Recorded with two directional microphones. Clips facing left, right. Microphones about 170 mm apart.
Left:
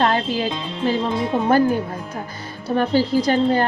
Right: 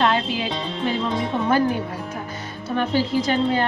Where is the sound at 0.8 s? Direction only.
40° left (ahead or behind).